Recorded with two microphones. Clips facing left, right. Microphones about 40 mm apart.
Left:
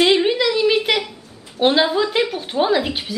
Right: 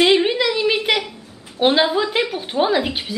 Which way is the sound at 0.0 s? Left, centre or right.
Centre.